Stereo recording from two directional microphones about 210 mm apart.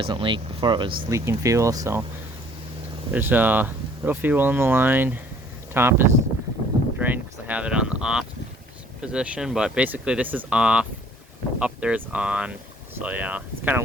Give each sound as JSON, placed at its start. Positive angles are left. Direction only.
{"t": 0.0, "sound": "speech", "side_deg": -25}
{"t": 3.1, "sound": "speech", "side_deg": -10}
{"t": 7.0, "sound": "a sound", "side_deg": -10}
{"t": 9.0, "sound": "speech", "side_deg": -5}